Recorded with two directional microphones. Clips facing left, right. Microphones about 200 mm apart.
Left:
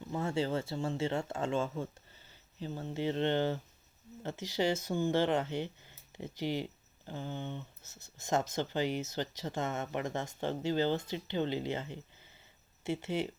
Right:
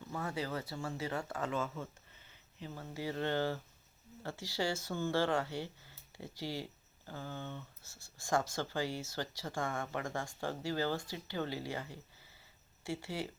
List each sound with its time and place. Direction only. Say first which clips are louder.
0.1 s speech: left 6 dB; 25° left (ahead or behind)